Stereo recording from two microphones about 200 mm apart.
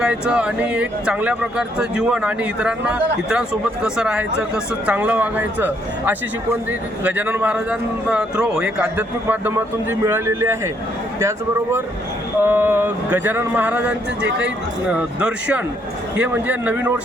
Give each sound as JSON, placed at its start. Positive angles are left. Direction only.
{"t": 0.0, "sound": "a man's voice", "side_deg": -5}